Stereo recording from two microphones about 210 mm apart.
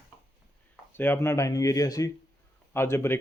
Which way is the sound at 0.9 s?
10° left (ahead or behind).